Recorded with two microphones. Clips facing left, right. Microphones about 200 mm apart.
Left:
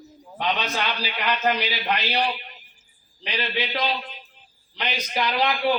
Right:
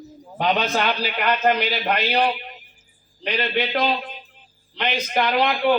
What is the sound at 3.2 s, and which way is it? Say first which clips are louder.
A man's voice: right 5 dB; 55° right (ahead or behind).